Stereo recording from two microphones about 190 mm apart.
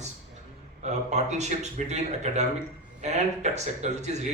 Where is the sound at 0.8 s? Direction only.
35° right (ahead or behind).